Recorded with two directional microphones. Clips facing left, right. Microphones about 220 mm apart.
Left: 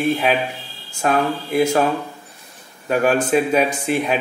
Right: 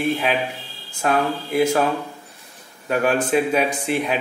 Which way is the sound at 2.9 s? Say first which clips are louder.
Left 2 dB; 40° left (ahead or behind).